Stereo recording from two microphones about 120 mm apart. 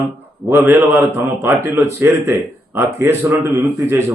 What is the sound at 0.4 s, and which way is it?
Speech, 20° right (ahead or behind).